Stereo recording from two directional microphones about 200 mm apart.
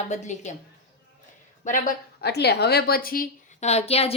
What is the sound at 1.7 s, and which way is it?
A woman's voice, 40° left (ahead or behind).